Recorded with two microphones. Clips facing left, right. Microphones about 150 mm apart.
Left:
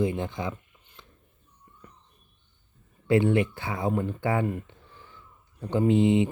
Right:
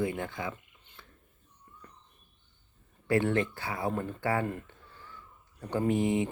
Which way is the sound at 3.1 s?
20° left (ahead or behind).